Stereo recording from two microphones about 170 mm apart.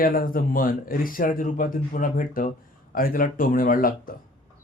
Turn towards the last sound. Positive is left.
turn(degrees=55)  # may be behind; listen again after turning